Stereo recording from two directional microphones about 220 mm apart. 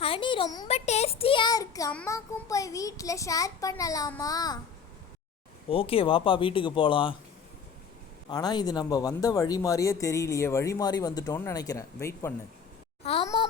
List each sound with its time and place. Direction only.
0.0 s a sound: 25° left (ahead or behind)
0.7 s speech: 30° left (ahead or behind)
5.6 s speech: 25° left (ahead or behind)
8.3 s speech: 20° left (ahead or behind)
13.0 s speech: 25° left (ahead or behind)